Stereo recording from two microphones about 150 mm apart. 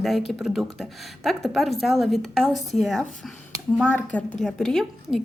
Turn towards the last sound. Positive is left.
turn(degrees=5)  # may be behind; listen again after turning